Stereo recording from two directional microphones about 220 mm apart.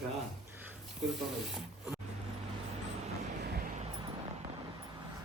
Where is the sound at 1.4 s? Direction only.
Centre (ahead or behind).